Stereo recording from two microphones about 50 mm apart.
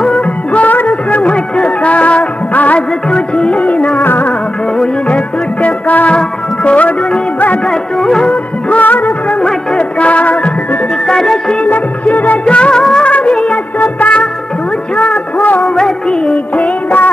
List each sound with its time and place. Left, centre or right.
0.5 s music: left
3.1 s music: left
4.0 s music: left
5.1 s music: left
8.0 s music: centre
8.6 s music of bollywood: left
9.4 s music: left
11.1 s music: centre
11.6 s music of bollywood: left
13.7 s music: left
15.6 s music of bollywood: centre